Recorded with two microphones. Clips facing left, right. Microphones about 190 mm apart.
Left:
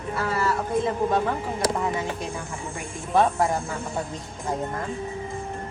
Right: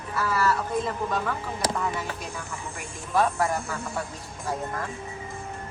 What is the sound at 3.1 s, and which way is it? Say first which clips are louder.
Music: left 3 dB; 25° left (ahead or behind).